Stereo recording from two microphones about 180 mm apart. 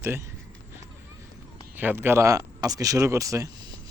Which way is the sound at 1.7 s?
10° right (ahead or behind).